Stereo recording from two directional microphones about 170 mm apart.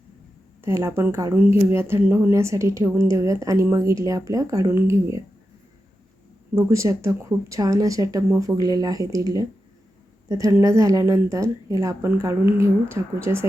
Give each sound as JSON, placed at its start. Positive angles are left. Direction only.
{"t": 0.6, "sound": "speech", "side_deg": -15}
{"t": 6.5, "sound": "speech", "side_deg": -15}